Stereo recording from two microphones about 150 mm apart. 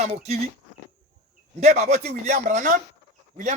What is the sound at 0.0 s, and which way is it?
Speech, 45° right (ahead or behind).